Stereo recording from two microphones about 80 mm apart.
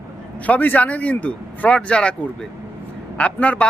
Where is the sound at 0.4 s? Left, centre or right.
Left.